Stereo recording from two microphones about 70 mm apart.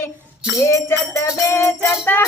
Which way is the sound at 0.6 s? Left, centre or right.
Left.